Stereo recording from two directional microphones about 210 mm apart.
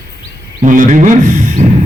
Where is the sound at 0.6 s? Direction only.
40° right (ahead or behind).